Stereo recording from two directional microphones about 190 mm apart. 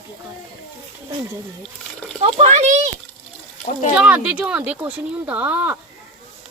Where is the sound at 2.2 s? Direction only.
35° right (ahead or behind).